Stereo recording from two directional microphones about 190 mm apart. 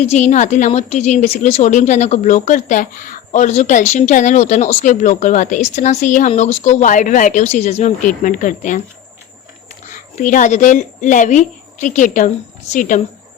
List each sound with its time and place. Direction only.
0.0 s a woman's voice: 35° left (ahead or behind)
9.9 s a woman's voice: 45° left (ahead or behind)